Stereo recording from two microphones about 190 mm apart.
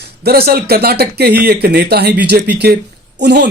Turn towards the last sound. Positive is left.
turn(degrees=-60)  # may be behind; listen again after turning